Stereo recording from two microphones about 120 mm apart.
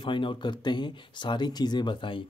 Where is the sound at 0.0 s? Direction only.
45° left (ahead or behind).